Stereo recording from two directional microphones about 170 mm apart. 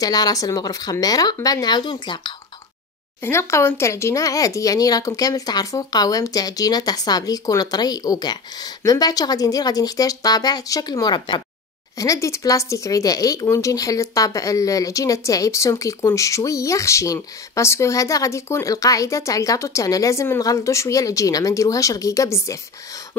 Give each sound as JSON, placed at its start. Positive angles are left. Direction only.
{"t": 0.0, "sound": "speech", "side_deg": 20}
{"t": 3.2, "sound": "speech", "side_deg": 15}